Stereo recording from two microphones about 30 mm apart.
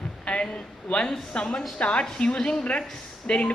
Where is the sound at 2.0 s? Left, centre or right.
Left.